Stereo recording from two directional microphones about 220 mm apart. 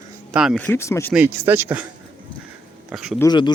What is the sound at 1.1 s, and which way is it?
Speech, 10° right (ahead or behind).